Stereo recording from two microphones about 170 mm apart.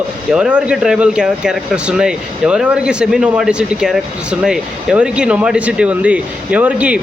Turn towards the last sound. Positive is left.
turn(degrees=-10)  # may be behind; listen again after turning